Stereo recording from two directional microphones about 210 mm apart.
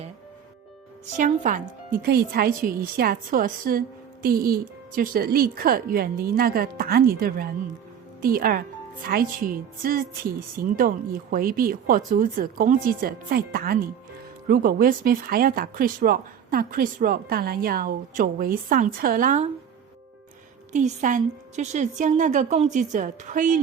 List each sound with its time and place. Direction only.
1.1 s a woman's voice: 40° right (ahead or behind)
20.7 s a woman's voice: 35° right (ahead or behind)